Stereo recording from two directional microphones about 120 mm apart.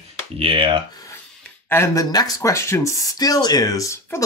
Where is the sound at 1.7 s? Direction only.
20° left (ahead or behind).